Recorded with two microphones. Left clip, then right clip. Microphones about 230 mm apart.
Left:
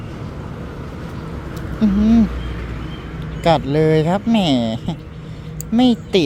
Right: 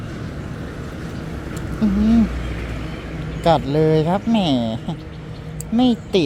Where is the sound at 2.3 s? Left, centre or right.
Right.